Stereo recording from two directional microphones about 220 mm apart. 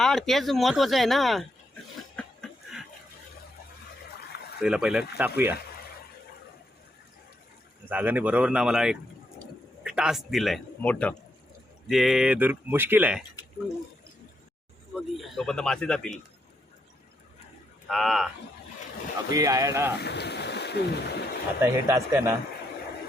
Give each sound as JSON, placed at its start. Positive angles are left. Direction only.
{"t": 0.0, "sound": "speech", "side_deg": 0}
{"t": 2.1, "sound": "a sound", "side_deg": 0}
{"t": 4.6, "sound": "speech", "side_deg": -5}
{"t": 7.9, "sound": "speech", "side_deg": -10}
{"t": 14.9, "sound": "speech", "side_deg": 0}
{"t": 17.8, "sound": "speech", "side_deg": 0}
{"t": 19.3, "sound": "speech", "side_deg": -15}
{"t": 20.0, "sound": "speech", "side_deg": 50}
{"t": 21.6, "sound": "speech", "side_deg": -10}